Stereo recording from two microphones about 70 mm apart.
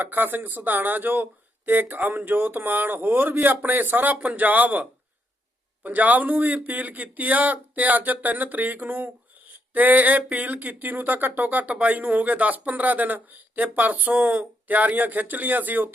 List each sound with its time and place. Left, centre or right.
0.0 s speech: right